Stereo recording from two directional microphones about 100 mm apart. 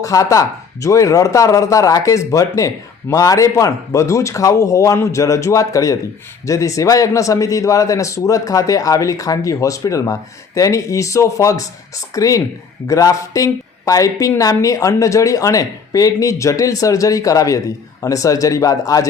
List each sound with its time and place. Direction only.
0.0 s a man's voice: 35° left (ahead or behind)